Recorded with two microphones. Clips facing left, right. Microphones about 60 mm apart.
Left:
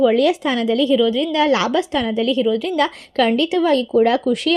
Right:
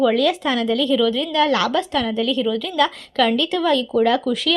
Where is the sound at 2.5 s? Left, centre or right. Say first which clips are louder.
Left 1 dB; left.